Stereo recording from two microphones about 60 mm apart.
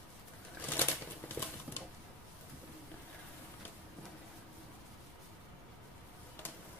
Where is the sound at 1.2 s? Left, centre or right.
Left.